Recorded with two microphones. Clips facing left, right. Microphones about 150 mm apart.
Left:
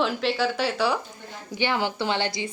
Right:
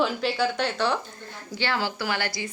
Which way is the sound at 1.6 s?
20° left (ahead or behind).